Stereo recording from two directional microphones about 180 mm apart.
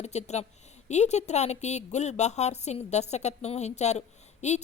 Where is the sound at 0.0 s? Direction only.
40° left (ahead or behind).